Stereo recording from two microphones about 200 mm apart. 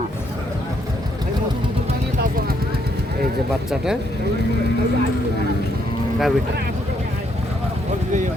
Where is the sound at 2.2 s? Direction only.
50° right (ahead or behind).